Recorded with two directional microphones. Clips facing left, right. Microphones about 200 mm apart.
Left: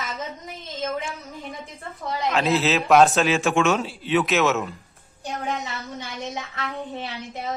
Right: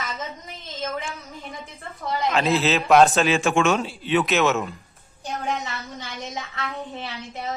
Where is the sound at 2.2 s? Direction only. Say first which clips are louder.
Even; centre (ahead or behind).